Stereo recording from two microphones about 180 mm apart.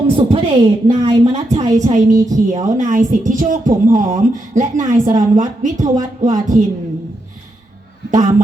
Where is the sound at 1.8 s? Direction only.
40° right (ahead or behind).